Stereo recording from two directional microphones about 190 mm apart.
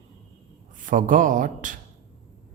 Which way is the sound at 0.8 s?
45° right (ahead or behind).